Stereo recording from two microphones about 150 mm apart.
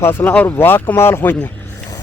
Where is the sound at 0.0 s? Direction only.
15° left (ahead or behind).